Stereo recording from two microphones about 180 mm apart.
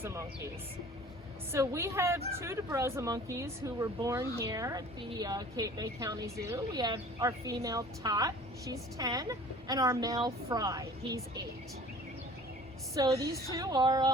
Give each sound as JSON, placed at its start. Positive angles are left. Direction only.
{"t": 0.0, "sound": "speech", "side_deg": -15}
{"t": 1.5, "sound": "speech", "side_deg": -15}
{"t": 12.9, "sound": "speech", "side_deg": -20}